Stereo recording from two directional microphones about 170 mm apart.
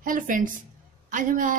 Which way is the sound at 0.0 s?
55° right (ahead or behind).